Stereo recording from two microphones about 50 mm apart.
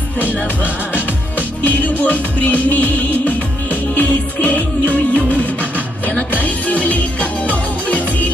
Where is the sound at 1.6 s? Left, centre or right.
Left.